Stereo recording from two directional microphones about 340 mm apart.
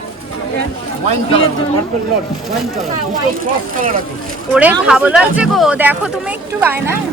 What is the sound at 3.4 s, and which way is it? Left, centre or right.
Speech, right.